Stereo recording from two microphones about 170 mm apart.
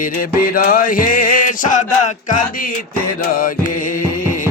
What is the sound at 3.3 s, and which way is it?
Music, 55° left (ahead or behind).